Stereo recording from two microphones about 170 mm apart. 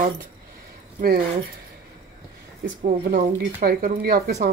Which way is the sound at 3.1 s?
60° right (ahead or behind).